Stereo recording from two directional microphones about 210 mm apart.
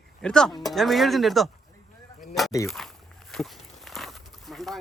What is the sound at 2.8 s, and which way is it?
Speech, centre (ahead or behind).